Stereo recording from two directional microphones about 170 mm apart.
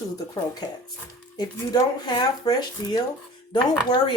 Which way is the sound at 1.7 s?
25° left (ahead or behind).